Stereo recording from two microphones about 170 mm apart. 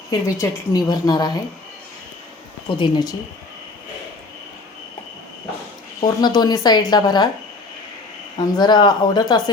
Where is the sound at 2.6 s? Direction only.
30° left (ahead or behind).